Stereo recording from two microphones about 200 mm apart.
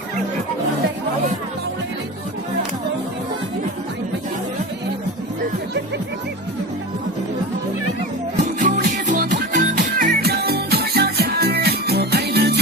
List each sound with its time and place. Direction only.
8.5 s music: 40° right (ahead or behind)